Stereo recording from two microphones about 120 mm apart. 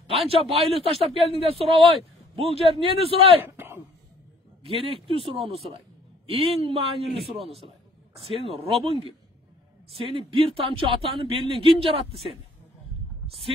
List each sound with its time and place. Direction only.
0.1 s speech: 50° right (ahead or behind)
3.5 s throat clearing: 20° right (ahead or behind)
4.6 s speech: 50° right (ahead or behind)
8.5 s speech: 50° right (ahead or behind)